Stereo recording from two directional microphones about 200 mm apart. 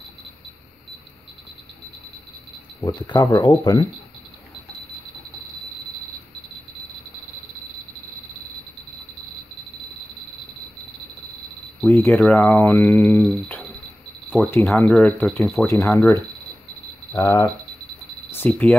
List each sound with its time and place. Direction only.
2.8 s speech: 20° left (ahead or behind)
11.8 s speech: 5° left (ahead or behind)
15.6 s speech: 15° left (ahead or behind)
17.1 s speech: 15° left (ahead or behind)